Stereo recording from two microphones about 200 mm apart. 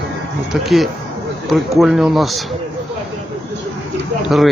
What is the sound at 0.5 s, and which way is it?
Speech, centre (ahead or behind).